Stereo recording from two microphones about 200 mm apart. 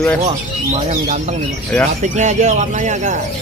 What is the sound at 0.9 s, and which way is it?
Speech, 40° right (ahead or behind).